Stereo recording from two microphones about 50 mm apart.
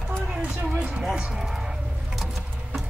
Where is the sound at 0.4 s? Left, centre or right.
Right.